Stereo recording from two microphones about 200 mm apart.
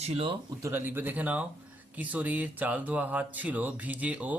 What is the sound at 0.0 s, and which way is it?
Speech, 30° right (ahead or behind).